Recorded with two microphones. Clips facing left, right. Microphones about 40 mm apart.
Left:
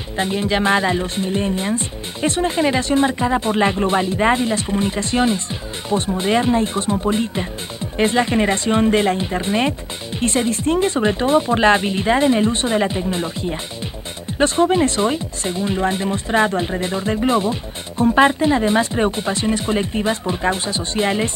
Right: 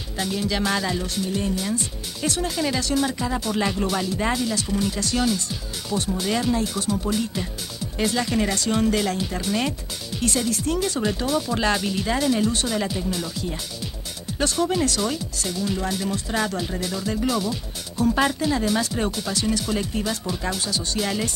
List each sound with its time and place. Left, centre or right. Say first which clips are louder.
0.2 s speech: left 6 dB; left